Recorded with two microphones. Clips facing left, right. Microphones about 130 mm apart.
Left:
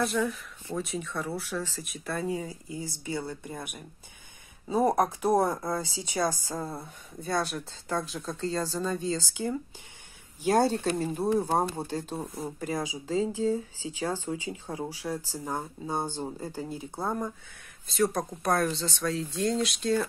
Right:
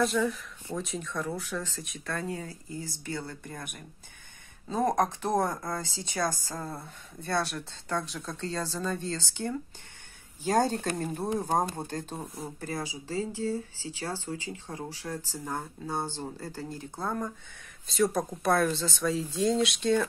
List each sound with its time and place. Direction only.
0.2 s speech: 5° left (ahead or behind)
17.8 s speech: centre (ahead or behind)